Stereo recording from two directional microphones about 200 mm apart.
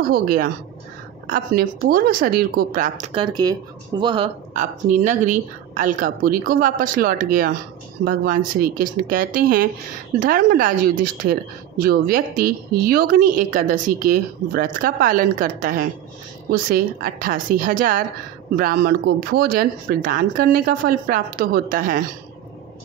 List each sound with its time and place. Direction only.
0.1 s speech: 45° right (ahead or behind)
3.1 s speech: 25° right (ahead or behind)
4.6 s speech: 35° right (ahead or behind)